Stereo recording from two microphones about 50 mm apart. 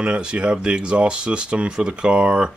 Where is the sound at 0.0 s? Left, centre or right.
Centre.